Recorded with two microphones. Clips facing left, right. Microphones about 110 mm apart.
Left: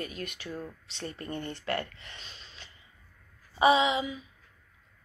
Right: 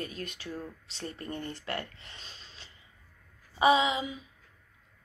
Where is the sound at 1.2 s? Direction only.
30° left (ahead or behind).